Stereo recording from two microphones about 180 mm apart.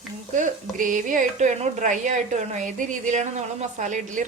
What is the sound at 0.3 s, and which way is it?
Speech, 45° right (ahead or behind).